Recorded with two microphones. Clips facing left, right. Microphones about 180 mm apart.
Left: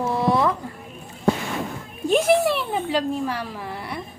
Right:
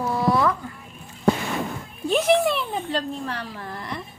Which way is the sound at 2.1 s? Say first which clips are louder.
Left 1 dB; centre (ahead or behind).